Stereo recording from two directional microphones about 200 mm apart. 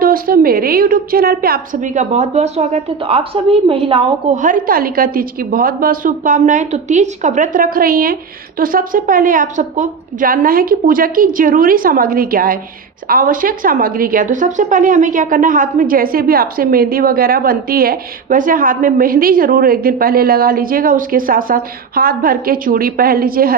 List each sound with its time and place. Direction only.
0.0 s a woman's voice: 45° right (ahead or behind); by 4.4 s 25° right (ahead or behind)
4.4 s a woman's voice: 40° right (ahead or behind)